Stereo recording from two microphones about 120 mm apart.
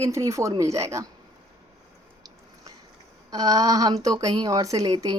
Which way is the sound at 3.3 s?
30° right (ahead or behind).